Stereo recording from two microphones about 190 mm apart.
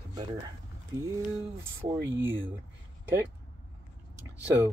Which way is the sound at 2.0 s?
90° right.